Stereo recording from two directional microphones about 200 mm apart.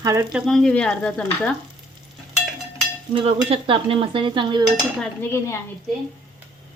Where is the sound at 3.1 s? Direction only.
25° right (ahead or behind).